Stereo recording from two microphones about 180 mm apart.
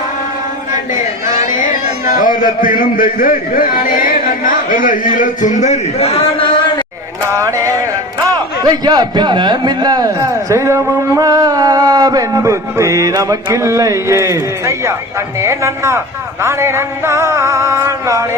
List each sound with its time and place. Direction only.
1.5 s speech: 45° left (ahead or behind); by 6.5 s 30° left (ahead or behind)
7.3 s music: 15° right (ahead or behind)
8.6 s a man's voice: 25° right (ahead or behind)
15.4 s music: 15° right (ahead or behind)